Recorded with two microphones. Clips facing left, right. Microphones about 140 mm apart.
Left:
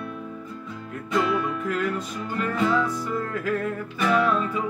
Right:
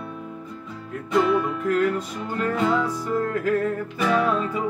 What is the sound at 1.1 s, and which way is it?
Music, 25° right (ahead or behind).